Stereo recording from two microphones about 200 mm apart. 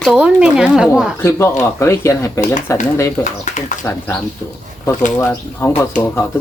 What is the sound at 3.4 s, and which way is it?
Crowing, 35° left (ahead or behind).